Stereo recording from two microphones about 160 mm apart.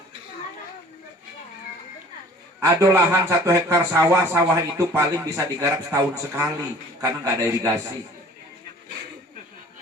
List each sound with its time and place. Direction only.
2.6 s a man's voice: 15° right (ahead or behind)